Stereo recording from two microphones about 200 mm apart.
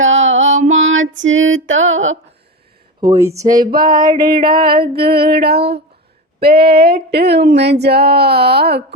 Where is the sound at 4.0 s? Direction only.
20° right (ahead or behind).